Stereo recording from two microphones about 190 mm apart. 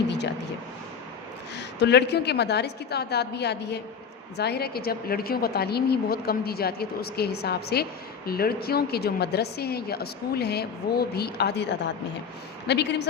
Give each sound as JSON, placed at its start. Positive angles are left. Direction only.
{"t": 1.5, "sound": "speech", "side_deg": 65}